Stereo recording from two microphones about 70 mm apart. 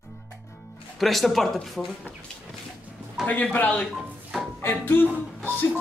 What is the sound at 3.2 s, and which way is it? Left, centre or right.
Speech, left.